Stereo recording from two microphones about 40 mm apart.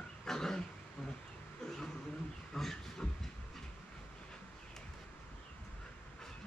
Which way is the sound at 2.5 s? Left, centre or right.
Centre.